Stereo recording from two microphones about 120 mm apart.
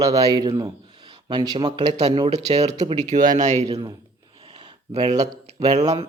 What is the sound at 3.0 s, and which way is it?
Speech, 80° right.